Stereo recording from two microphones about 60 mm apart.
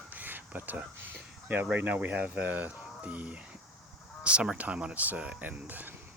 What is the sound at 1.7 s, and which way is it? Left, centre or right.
Speech, right.